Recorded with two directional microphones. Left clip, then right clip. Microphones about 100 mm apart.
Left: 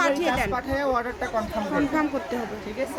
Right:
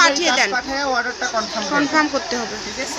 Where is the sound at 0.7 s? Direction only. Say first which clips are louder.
Right 3 dB; 40° left (ahead or behind).